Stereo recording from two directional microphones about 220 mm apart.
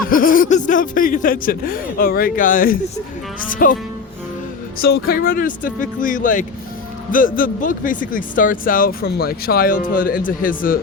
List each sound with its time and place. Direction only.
0.1 s speech: 40° left (ahead or behind)
4.8 s speech: 45° left (ahead or behind)